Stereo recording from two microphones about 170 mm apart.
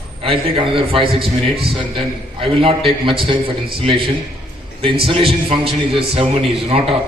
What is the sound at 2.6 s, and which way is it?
A man's voice, 35° right (ahead or behind).